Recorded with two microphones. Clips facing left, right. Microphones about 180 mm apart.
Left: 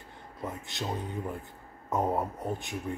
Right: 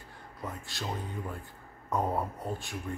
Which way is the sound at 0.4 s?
20° left (ahead or behind).